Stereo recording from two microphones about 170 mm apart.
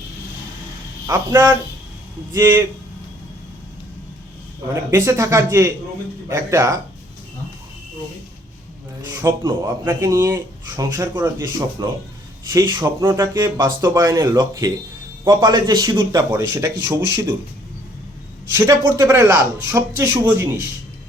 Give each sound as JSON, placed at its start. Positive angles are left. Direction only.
{"t": 1.0, "sound": "speech", "side_deg": -20}
{"t": 4.7, "sound": "speech", "side_deg": -20}
{"t": 9.0, "sound": "speech", "side_deg": -20}
{"t": 18.5, "sound": "speech", "side_deg": -20}